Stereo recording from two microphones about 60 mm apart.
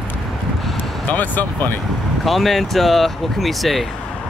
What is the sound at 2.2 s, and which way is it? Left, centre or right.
Speech, centre.